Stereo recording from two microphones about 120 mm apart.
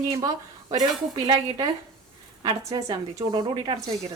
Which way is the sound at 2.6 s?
30° right (ahead or behind).